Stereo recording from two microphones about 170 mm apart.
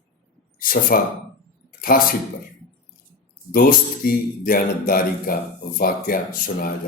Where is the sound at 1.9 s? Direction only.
60° left (ahead or behind).